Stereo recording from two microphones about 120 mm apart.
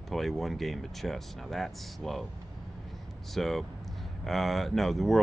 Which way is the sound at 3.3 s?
Centre (ahead or behind).